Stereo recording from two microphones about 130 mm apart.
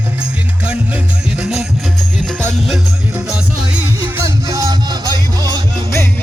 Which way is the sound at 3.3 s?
10° right (ahead or behind).